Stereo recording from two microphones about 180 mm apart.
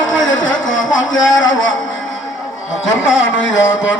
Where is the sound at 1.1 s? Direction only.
90° left.